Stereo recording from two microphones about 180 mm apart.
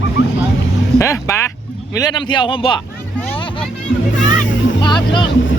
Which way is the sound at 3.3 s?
30° left (ahead or behind).